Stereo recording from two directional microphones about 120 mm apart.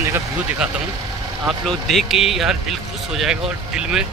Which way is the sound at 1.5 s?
Centre (ahead or behind).